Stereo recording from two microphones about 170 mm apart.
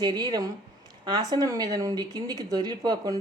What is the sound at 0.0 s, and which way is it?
Speech, 25° right (ahead or behind).